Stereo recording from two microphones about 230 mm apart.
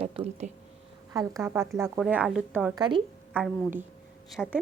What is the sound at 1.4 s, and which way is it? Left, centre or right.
Speech, centre.